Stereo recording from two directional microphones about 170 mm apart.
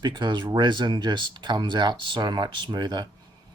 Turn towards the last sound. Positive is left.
turn(degrees=-25)  # may be behind; listen again after turning